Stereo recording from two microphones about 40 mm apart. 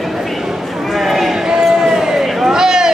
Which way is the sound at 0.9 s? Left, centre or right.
Centre.